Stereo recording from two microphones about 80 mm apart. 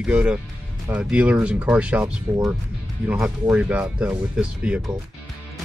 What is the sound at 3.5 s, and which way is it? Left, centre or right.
Speech, centre.